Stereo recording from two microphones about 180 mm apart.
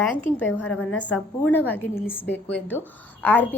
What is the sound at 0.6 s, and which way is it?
A woman's voice, 5° left (ahead or behind).